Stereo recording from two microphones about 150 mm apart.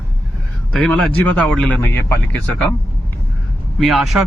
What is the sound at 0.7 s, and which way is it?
A man's voice, 10° left (ahead or behind).